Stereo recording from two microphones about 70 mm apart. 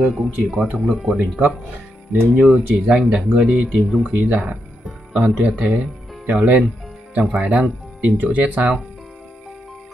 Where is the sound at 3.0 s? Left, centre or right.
Centre.